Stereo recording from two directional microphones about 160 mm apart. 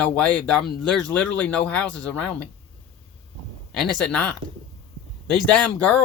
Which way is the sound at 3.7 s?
5° left (ahead or behind).